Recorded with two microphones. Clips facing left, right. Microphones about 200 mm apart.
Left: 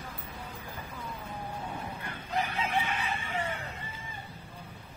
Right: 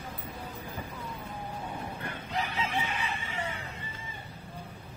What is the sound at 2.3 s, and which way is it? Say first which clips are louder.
Chicken: left 2 dB; 50° left (ahead or behind).